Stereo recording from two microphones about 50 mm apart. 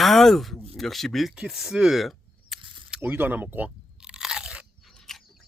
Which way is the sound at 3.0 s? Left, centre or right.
Right.